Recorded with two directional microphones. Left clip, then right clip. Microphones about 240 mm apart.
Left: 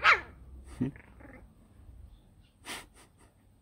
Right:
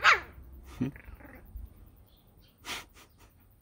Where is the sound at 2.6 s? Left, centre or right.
Centre.